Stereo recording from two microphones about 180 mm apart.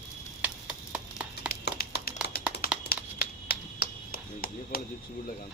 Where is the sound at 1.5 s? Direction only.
60° left (ahead or behind).